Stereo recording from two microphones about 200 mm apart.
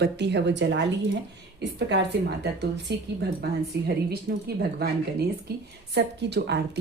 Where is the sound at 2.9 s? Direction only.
55° right (ahead or behind).